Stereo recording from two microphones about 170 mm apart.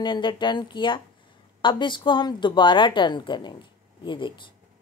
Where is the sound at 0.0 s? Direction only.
30° left (ahead or behind).